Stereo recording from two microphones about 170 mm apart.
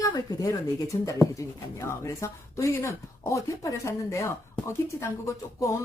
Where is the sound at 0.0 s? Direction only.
20° left (ahead or behind).